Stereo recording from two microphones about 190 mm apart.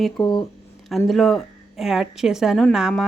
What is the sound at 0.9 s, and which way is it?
A woman's voice, centre (ahead or behind).